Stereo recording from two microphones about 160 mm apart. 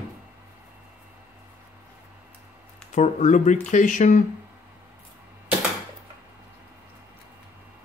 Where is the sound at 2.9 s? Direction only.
50° left (ahead or behind).